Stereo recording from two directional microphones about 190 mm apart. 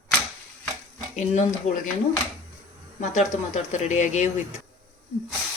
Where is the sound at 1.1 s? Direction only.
40° left (ahead or behind).